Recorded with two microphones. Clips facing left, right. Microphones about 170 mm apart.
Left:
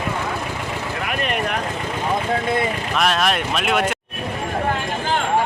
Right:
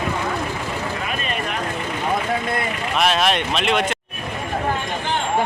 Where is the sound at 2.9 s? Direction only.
Centre (ahead or behind).